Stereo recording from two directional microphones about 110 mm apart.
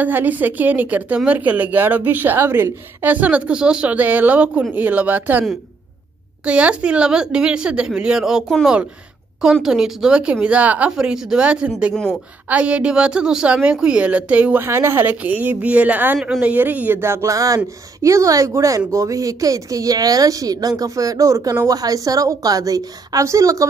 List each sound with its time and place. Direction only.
0.0 s speech: 15° right (ahead or behind)
6.4 s a woman's voice: 10° right (ahead or behind); by 23.7 s 30° right (ahead or behind)